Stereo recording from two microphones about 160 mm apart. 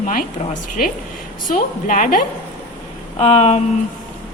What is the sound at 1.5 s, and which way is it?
Speech, 55° left (ahead or behind).